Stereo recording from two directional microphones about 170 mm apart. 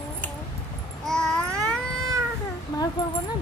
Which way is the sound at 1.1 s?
5° left (ahead or behind).